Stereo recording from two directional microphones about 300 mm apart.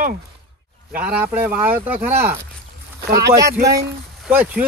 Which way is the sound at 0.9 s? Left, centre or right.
Centre.